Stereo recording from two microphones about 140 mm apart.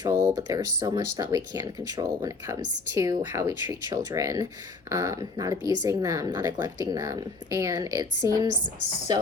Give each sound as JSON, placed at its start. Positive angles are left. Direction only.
{"t": 0.0, "sound": "speech", "side_deg": -30}